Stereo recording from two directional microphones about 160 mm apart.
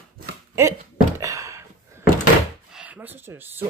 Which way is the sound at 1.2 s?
20° right (ahead or behind).